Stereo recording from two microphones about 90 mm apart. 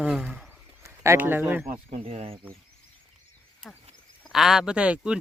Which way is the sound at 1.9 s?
90° right.